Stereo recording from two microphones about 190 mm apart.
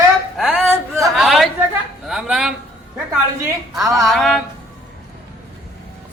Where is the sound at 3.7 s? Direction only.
Centre (ahead or behind).